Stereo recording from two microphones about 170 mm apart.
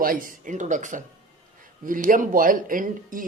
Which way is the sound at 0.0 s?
55° right (ahead or behind).